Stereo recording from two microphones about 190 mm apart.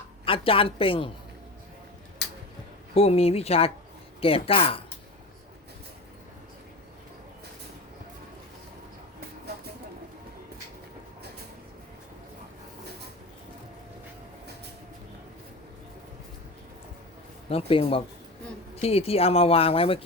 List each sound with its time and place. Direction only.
0.3 s a woman's voice: 30° left (ahead or behind)
2.9 s a woman's voice: 30° left (ahead or behind)
17.5 s a woman's voice: 30° left (ahead or behind)